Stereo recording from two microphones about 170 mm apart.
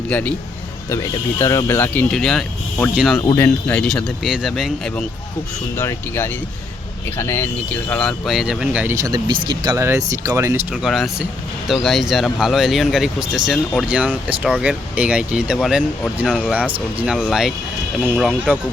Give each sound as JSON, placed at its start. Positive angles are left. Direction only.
{"t": 0.1, "sound": "speech", "side_deg": 10}
{"t": 0.9, "sound": "speech", "side_deg": 20}
{"t": 3.2, "sound": "speech", "side_deg": 15}
{"t": 5.7, "sound": "speech", "side_deg": 15}
{"t": 9.0, "sound": "speech", "side_deg": -25}
{"t": 10.8, "sound": "speech", "side_deg": 0}